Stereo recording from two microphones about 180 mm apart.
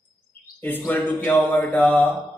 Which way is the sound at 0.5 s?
10° left (ahead or behind).